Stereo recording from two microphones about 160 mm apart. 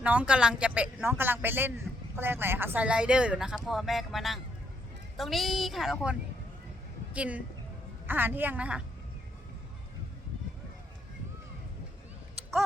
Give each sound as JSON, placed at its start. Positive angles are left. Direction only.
{"t": 0.0, "sound": "a woman's voice", "side_deg": -10}